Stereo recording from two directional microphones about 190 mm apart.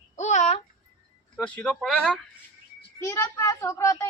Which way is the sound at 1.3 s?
5° left (ahead or behind).